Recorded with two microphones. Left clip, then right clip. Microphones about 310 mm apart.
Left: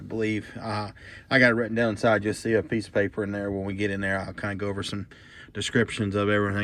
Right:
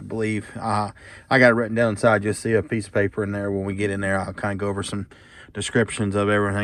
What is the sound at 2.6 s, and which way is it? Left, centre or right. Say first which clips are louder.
Speech: right 3 dB; right.